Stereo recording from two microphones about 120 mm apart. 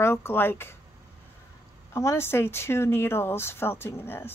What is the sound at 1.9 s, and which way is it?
Speech, 20° left (ahead or behind).